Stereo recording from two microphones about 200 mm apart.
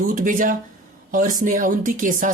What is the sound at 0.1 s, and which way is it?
Speech, 40° right (ahead or behind).